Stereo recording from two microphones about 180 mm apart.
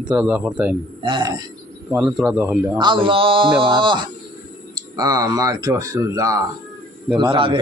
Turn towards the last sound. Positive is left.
turn(degrees=-30)  # may be behind; listen again after turning